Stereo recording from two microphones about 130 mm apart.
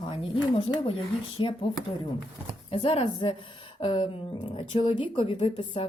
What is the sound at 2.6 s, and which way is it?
A woman's voice, 50° left (ahead or behind).